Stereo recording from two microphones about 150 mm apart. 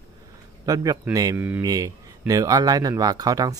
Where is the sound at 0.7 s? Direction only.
25° right (ahead or behind).